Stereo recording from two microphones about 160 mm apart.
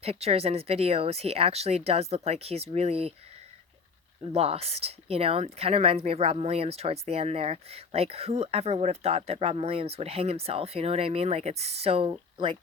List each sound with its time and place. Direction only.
0.0 s speech: 40° right (ahead or behind)
4.3 s speech: 40° right (ahead or behind)